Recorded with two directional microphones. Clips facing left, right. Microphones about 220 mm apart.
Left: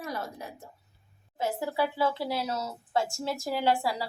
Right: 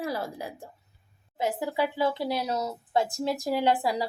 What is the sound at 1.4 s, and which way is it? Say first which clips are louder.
A woman's voice: right 2 dB; 15° right (ahead or behind).